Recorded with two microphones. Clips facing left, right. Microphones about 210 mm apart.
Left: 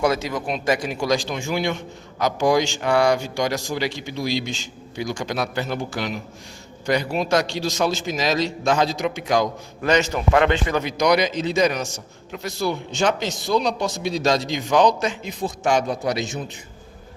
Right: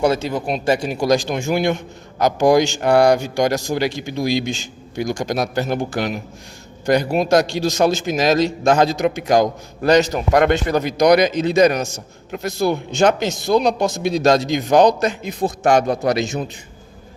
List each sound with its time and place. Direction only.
0.0 s speech: 30° right (ahead or behind)
0.9 s a man's voice: 40° right (ahead or behind)
15.3 s a man's voice: 60° right (ahead or behind)